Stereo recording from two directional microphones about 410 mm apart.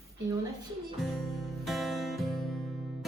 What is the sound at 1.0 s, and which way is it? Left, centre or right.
Music, centre.